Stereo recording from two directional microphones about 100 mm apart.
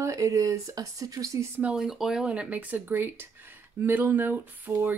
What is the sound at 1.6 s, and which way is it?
Speech, 10° right (ahead or behind).